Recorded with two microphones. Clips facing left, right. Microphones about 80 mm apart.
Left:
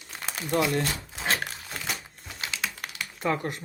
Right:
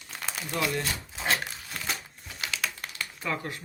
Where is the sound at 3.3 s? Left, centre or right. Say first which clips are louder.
Left 5 dB; left.